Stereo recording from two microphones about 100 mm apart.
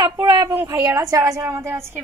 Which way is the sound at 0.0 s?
40° right (ahead or behind).